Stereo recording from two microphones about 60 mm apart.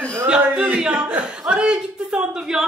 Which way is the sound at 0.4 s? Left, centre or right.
Right.